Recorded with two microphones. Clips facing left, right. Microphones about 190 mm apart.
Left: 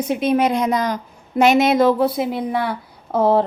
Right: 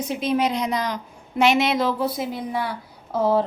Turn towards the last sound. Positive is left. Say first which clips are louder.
# left 4 dB
turn(degrees=60)  # may be behind; listen again after turning